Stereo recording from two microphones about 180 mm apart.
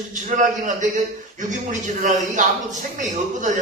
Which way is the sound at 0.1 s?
45° right (ahead or behind).